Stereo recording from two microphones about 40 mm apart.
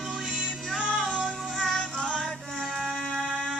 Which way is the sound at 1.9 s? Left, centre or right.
Centre.